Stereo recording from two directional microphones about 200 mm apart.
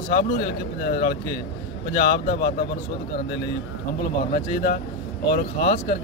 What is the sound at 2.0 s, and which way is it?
Speech, 50° left (ahead or behind).